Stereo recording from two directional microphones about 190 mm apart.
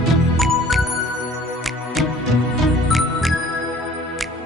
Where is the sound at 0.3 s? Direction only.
Centre (ahead or behind).